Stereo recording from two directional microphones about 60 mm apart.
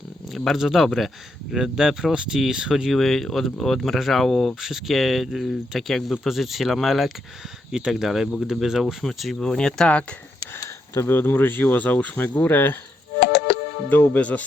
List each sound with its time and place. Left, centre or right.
0.3 s speech: centre
3.0 s speech: centre
11.0 s speech: left
13.9 s speech: left